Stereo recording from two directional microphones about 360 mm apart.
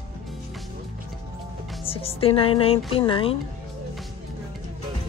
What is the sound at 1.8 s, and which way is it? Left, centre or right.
Speech, centre.